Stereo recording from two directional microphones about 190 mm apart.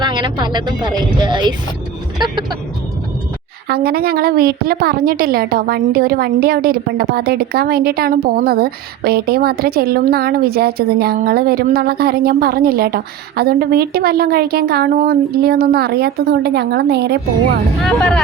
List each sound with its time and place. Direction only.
0.0 s speech: 25° right (ahead or behind)
3.7 s a woman's voice: 55° right (ahead or behind)
17.8 s speech: 5° left (ahead or behind)